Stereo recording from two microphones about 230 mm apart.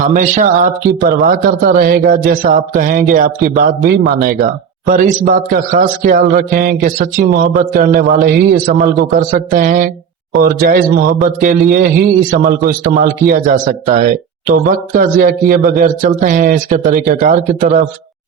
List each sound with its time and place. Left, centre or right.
0.1 s speech: right